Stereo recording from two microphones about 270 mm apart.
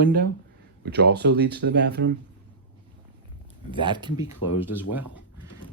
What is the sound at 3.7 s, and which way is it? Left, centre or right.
Speech, centre.